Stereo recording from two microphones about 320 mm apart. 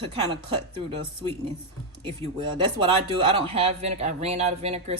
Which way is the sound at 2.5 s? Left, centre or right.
Centre.